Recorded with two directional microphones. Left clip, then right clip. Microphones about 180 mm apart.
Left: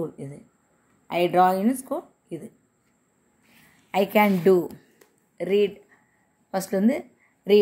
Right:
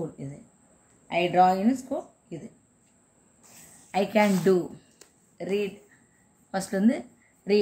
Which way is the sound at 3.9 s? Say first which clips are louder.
Left 3 dB; 30° left (ahead or behind).